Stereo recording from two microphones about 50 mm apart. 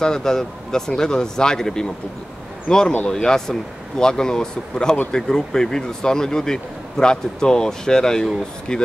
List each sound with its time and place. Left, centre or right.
0.0 s speech: centre